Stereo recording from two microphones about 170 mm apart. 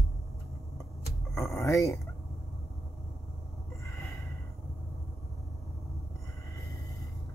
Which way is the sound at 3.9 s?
15° left (ahead or behind).